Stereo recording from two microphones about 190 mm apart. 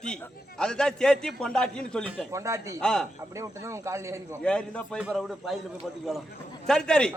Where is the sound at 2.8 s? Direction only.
5° left (ahead or behind).